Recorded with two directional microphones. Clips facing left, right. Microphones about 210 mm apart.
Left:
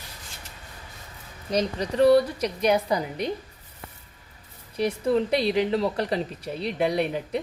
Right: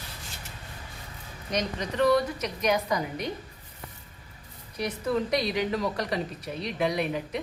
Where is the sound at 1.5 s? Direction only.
35° left (ahead or behind).